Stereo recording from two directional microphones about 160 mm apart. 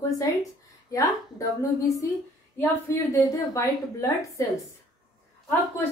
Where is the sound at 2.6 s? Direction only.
15° left (ahead or behind).